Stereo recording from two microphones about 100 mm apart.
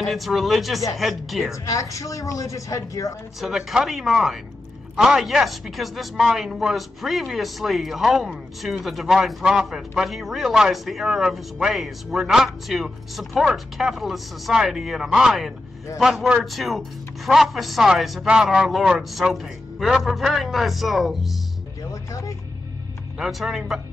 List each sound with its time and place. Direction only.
0.0 s speech: centre (ahead or behind)
1.5 s speech: 35° left (ahead or behind)
3.3 s speech: 5° right (ahead or behind)
23.1 s speech: 5° right (ahead or behind)